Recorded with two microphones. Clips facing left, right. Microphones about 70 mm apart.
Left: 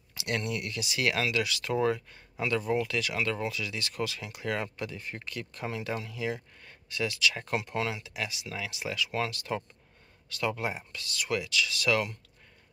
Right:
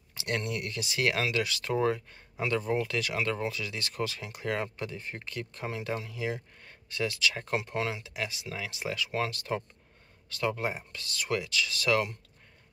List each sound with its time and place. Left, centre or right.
0.1 s speech: right
6.9 s speech: right